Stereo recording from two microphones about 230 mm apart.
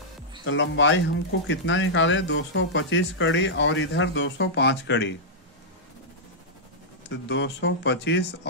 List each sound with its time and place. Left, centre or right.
0.5 s speech: left
7.1 s speech: left